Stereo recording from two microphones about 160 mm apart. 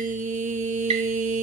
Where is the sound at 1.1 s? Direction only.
55° right (ahead or behind).